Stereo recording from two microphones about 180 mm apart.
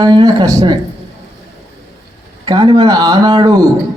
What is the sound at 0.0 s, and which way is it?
Speech, 20° right (ahead or behind).